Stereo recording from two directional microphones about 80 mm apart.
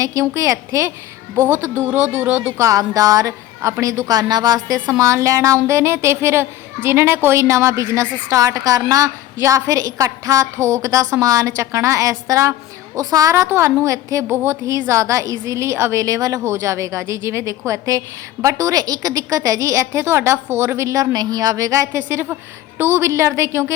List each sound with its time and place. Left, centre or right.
0.0 s a woman's voice: right
1.5 s speech: right
2.6 s a woman's voice: right
13.3 s a woman's voice: right
14.3 s a woman's voice: right